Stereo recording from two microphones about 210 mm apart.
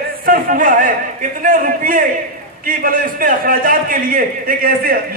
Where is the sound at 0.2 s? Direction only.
40° right (ahead or behind).